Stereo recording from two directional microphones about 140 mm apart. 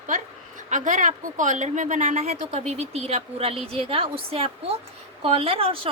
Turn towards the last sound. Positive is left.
turn(degrees=-40)  # may be behind; listen again after turning